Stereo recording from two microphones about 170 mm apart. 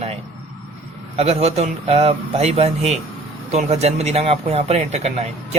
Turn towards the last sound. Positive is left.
turn(degrees=-40)  # may be behind; listen again after turning